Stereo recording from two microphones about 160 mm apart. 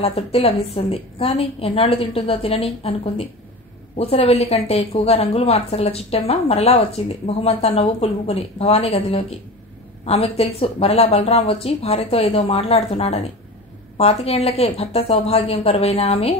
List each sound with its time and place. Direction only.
0.0 s speech: 40° left (ahead or behind)